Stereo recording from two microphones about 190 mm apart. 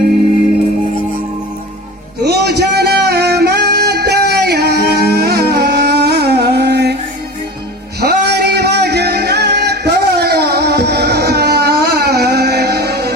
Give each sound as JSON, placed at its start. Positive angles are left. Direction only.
{"t": 2.2, "sound": "music", "side_deg": -60}
{"t": 8.0, "sound": "music", "side_deg": -60}